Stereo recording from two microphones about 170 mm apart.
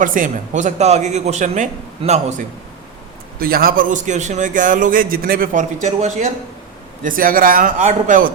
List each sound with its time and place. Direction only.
0.0 s a man's voice: 50° right (ahead or behind)
3.3 s a man's voice: 60° right (ahead or behind); by 6.3 s 45° right (ahead or behind)
7.0 s a man's voice: 55° right (ahead or behind)